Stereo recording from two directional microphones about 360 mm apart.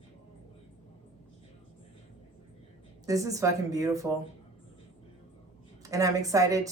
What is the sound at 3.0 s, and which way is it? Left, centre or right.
Speech, centre.